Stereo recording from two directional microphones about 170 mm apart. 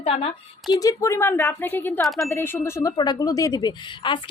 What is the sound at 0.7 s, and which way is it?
A woman's voice, 20° left (ahead or behind).